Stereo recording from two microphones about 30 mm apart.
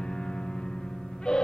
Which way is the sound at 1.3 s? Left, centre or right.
Left.